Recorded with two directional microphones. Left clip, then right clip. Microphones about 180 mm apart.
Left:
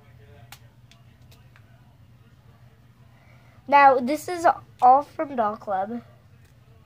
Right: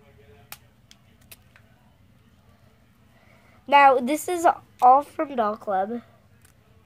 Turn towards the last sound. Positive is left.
turn(degrees=-40)  # may be behind; listen again after turning